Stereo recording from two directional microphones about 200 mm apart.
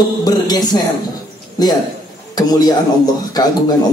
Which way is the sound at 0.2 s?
20° left (ahead or behind).